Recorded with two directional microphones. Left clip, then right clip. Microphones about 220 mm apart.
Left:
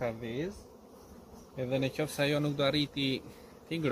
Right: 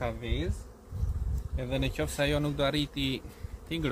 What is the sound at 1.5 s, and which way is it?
Speech, 45° right (ahead or behind).